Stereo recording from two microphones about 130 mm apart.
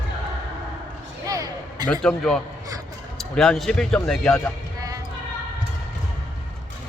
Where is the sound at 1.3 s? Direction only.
25° right (ahead or behind).